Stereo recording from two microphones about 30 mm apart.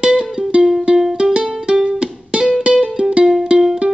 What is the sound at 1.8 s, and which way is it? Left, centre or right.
Music, right.